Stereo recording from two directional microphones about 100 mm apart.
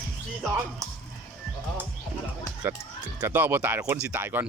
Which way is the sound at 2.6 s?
20° right (ahead or behind).